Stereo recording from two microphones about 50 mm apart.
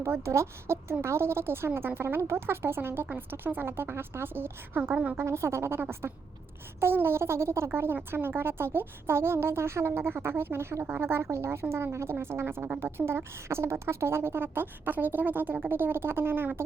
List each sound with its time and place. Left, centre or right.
0.3 s a woman's voice: right
5.2 s speech: right
6.7 s speech: right
7.7 s a woman's voice: right